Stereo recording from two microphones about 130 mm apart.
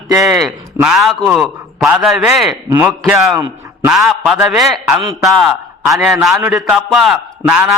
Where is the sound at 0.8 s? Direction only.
Centre (ahead or behind).